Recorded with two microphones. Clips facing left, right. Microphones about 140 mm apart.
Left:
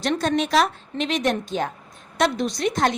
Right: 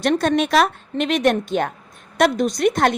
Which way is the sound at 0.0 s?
60° right (ahead or behind).